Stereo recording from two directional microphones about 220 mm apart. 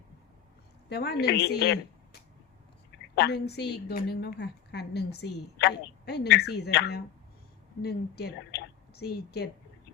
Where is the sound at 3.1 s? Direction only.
50° left (ahead or behind).